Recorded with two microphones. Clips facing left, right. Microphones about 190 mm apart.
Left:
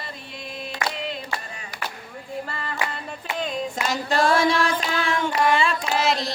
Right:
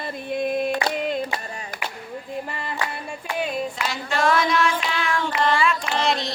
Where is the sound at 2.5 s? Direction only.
15° right (ahead or behind).